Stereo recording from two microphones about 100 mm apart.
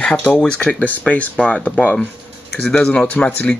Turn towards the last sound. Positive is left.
turn(degrees=15)  # may be behind; listen again after turning